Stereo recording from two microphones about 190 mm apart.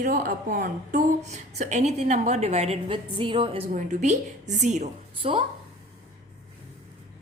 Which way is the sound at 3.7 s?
40° right (ahead or behind).